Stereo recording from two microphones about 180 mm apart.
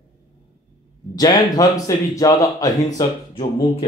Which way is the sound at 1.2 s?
20° left (ahead or behind).